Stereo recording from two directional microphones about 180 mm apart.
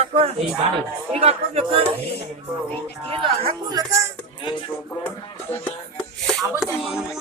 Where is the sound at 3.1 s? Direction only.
30° right (ahead or behind).